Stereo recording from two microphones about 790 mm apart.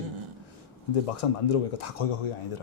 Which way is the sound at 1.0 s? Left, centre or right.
Left.